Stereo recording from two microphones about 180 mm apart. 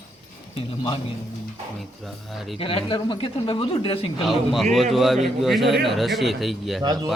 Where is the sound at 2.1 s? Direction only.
Centre (ahead or behind).